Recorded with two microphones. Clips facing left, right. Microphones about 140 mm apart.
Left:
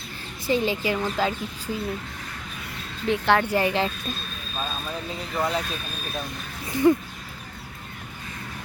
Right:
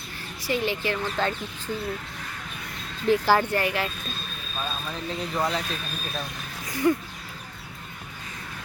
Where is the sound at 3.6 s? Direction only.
25° left (ahead or behind).